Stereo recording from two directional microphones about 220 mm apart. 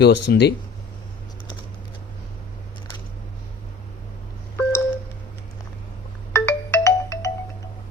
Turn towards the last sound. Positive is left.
turn(degrees=15)  # may be behind; listen again after turning